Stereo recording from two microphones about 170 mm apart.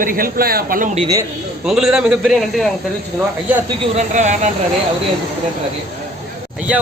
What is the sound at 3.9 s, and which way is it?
Speech, 45° right (ahead or behind).